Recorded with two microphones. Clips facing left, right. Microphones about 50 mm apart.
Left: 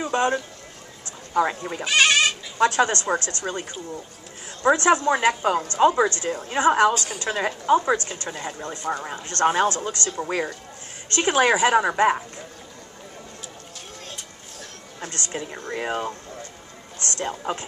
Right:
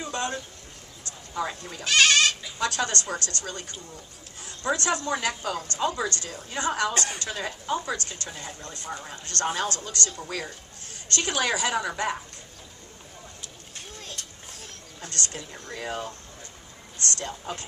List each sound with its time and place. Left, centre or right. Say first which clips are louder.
0.0 s a sound: left 8 dB; left
1.3 s speech: left 9 dB; left
1.9 s goat: left 2 dB; centre
2.6 s a woman's voice: left 8 dB; left
6.9 s a woman's voice: left 4 dB; right
7.2 s a woman's voice: left 9 dB; left
15.3 s speech: left 8 dB; left
17.2 s speech: left 7 dB; left